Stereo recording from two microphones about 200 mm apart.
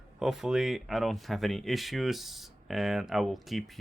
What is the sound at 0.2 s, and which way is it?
Speech, centre (ahead or behind).